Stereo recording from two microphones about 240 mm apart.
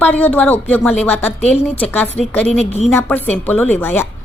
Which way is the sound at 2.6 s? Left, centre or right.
Left.